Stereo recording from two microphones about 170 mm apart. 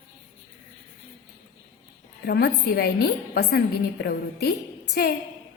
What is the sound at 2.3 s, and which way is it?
A woman's voice, 65° left (ahead or behind).